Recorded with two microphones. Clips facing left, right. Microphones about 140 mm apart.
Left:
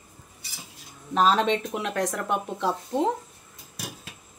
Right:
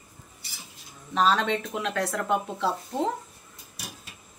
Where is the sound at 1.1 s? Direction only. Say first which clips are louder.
Left 2 dB; 35° left (ahead or behind).